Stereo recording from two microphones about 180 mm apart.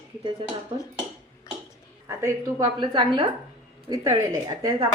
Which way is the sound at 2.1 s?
15° right (ahead or behind).